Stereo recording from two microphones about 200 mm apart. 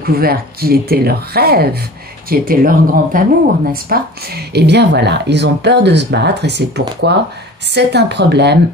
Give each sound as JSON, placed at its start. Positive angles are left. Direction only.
{"t": 0.0, "sound": "speech", "side_deg": -50}